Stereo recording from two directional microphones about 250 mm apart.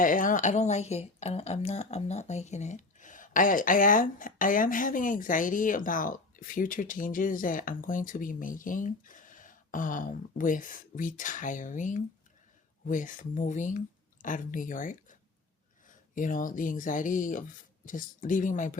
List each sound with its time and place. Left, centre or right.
0.0 s speech: left